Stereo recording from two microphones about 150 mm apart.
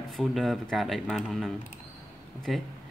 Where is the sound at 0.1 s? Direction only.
Centre (ahead or behind).